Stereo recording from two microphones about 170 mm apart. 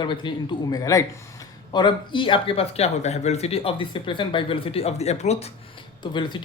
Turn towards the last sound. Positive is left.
turn(degrees=25)  # may be behind; listen again after turning